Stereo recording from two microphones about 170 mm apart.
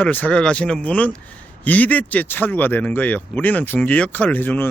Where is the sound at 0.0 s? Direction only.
10° left (ahead or behind).